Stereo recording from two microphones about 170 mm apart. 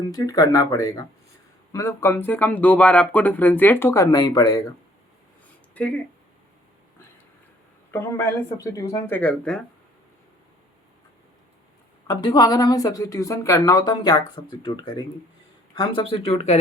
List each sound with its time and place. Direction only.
0.1 s speech: 20° left (ahead or behind)
5.7 s speech: 10° left (ahead or behind)
7.9 s speech: 15° left (ahead or behind)
12.0 s speech: 25° left (ahead or behind)